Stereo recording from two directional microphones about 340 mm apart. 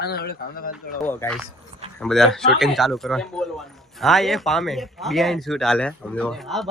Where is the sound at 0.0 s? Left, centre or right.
Left.